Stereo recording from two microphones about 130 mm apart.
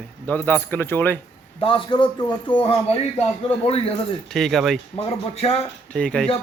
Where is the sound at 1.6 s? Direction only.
40° left (ahead or behind).